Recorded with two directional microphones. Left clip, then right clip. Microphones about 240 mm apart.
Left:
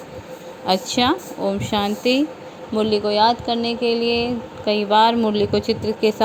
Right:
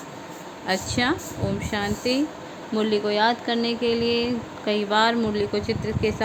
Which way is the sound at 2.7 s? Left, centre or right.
Centre.